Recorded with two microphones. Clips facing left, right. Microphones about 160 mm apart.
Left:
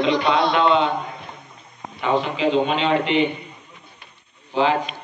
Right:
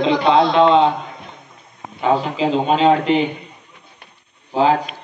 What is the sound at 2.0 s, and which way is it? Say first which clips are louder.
A man's voice: right 3 dB; 35° right (ahead or behind).